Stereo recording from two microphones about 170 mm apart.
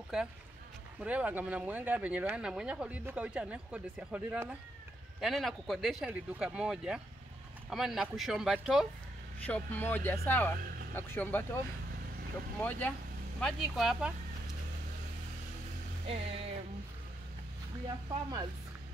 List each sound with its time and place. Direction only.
0.1 s speech: centre (ahead or behind)
9.5 s speech: 10° left (ahead or behind)
16.1 s music: 35° right (ahead or behind)
17.8 s speech: 25° right (ahead or behind)